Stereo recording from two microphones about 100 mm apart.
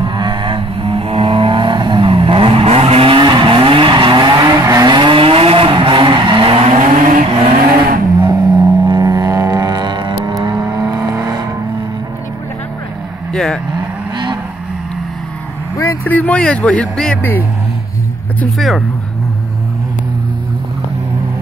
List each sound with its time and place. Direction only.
0.0 s vehicle: 50° right (ahead or behind)
6.5 s vehicle: 75° right (ahead or behind)
8.2 s music: 40° right (ahead or behind)
10.2 s vehicle: 40° right (ahead or behind)
13.3 s vehicle: 5° left (ahead or behind)
14.1 s vehicle: 50° right (ahead or behind)
15.8 s vehicle: 30° left (ahead or behind)
16.1 s speech: 15° left (ahead or behind)